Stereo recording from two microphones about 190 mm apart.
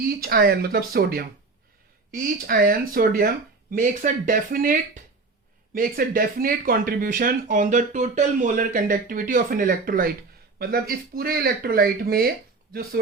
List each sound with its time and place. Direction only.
0.2 s speech: 50° right (ahead or behind)
2.5 s speech: 50° right (ahead or behind)